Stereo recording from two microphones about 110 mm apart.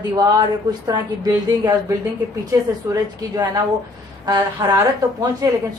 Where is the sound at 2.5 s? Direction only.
30° right (ahead or behind).